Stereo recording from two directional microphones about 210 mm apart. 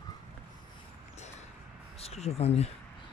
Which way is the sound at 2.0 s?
30° left (ahead or behind).